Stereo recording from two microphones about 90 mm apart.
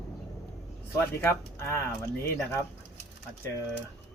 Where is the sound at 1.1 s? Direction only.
25° left (ahead or behind).